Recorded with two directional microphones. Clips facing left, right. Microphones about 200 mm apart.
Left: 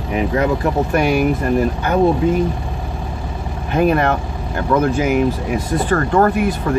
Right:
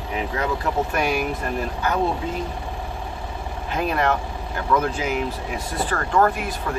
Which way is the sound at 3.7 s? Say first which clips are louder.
Left 7 dB; 55° left (ahead or behind).